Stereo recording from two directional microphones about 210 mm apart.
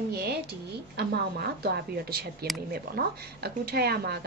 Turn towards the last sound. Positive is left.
turn(degrees=-50)  # may be behind; listen again after turning